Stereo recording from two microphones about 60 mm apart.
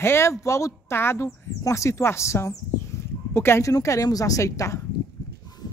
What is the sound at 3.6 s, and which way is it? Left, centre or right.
A woman's voice, left.